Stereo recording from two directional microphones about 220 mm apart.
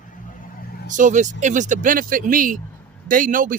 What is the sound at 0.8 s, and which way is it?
Speech, 35° right (ahead or behind).